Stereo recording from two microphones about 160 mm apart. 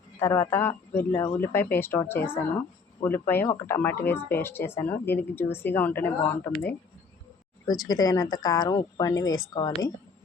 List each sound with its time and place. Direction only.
0.2 s speech: 15° left (ahead or behind)
7.7 s speech: 25° left (ahead or behind)